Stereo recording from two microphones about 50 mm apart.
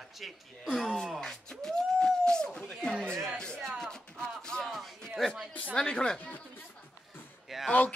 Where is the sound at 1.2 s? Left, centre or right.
Centre.